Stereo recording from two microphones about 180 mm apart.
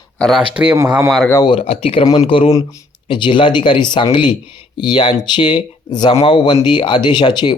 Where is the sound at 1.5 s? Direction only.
30° left (ahead or behind).